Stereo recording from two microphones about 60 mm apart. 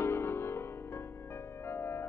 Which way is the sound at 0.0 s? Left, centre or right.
Left.